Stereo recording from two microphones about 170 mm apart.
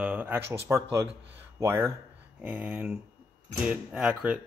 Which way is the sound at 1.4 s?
15° right (ahead or behind).